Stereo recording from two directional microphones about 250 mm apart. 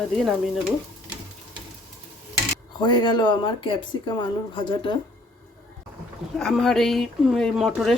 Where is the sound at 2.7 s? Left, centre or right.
Centre.